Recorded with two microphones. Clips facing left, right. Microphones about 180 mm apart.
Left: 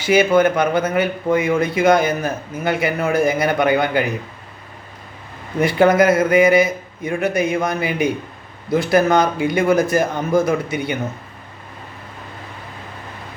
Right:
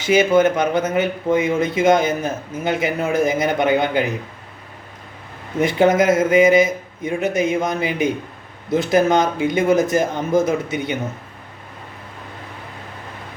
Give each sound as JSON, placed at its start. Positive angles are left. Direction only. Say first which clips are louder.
{"t": 0.0, "sound": "a man's voice", "louder": "even", "side_deg": -20}
{"t": 5.5, "sound": "a man's voice", "louder": "left 1 dB", "side_deg": -20}